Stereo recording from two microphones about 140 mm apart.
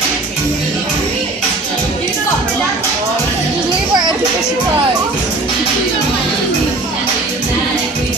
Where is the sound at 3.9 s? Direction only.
30° right (ahead or behind).